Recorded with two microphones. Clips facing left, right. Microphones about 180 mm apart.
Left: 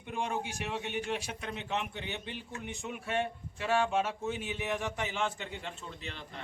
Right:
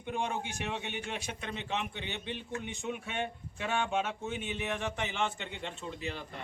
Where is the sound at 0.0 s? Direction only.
Centre (ahead or behind).